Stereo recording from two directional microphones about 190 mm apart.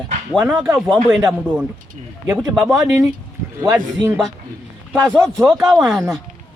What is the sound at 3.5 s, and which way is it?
Speech, 15° right (ahead or behind).